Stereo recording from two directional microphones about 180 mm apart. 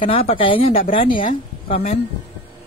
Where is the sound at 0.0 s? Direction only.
30° left (ahead or behind).